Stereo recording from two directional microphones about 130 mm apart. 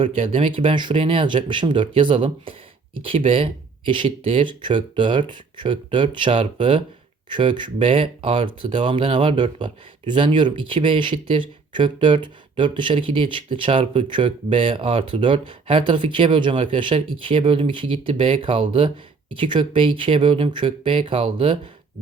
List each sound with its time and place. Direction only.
0.3 s speech: 45° right (ahead or behind)